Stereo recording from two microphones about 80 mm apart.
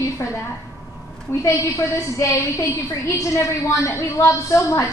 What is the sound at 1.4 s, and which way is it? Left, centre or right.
A woman's voice, left.